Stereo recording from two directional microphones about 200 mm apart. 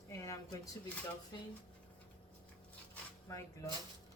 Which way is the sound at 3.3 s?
15° left (ahead or behind).